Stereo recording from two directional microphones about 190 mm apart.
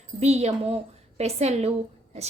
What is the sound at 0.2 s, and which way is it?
A woman's voice, 35° right (ahead or behind).